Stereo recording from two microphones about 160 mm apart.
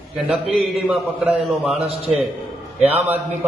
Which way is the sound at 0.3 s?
Centre (ahead or behind).